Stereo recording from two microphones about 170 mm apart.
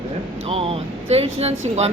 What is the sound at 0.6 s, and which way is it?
Speech, 35° right (ahead or behind).